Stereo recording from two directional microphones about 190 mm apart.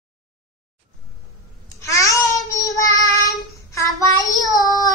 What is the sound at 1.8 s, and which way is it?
Babbling, 15° left (ahead or behind).